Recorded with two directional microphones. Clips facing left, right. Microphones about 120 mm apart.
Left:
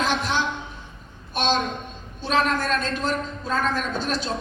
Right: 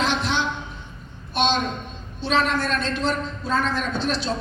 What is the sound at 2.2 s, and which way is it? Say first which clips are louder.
A man's voice: even; 45° left (ahead or behind).